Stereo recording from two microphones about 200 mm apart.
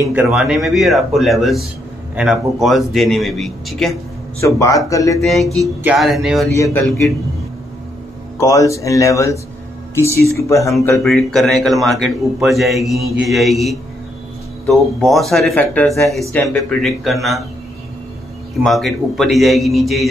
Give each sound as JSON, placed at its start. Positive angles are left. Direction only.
{"t": 0.1, "sound": "a man's voice", "side_deg": -5}
{"t": 3.9, "sound": "speech", "side_deg": 15}
{"t": 5.2, "sound": "a man's voice", "side_deg": 0}
{"t": 6.5, "sound": "speech", "side_deg": 15}
{"t": 8.4, "sound": "speech", "side_deg": 15}
{"t": 11.0, "sound": "a man's voice", "side_deg": 0}
{"t": 18.6, "sound": "a man's voice", "side_deg": 0}